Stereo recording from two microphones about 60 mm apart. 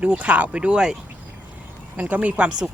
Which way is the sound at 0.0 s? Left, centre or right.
Right.